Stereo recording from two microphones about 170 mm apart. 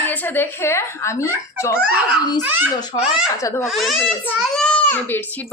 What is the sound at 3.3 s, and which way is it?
Speech, 15° left (ahead or behind).